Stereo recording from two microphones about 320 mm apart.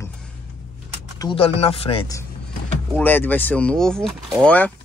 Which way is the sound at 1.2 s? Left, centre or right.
Centre.